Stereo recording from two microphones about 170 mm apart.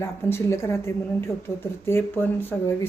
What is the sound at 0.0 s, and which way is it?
Speech, 15° left (ahead or behind).